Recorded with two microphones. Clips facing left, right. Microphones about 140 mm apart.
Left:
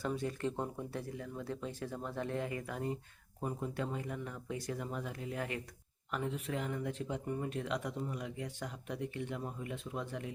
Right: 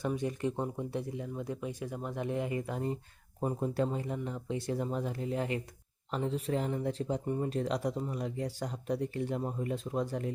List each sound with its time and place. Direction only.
0.0 s speech: 20° right (ahead or behind); by 10.3 s 40° right (ahead or behind)